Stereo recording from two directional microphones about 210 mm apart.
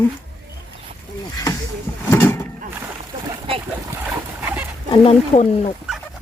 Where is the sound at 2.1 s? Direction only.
15° left (ahead or behind).